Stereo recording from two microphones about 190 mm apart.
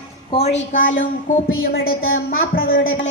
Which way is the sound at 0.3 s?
35° left (ahead or behind).